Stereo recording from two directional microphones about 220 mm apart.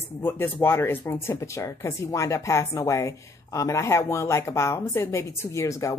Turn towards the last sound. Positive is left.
turn(degrees=15)  # may be behind; listen again after turning